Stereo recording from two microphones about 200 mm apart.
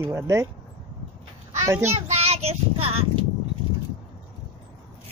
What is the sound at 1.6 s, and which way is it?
Speech, 10° right (ahead or behind).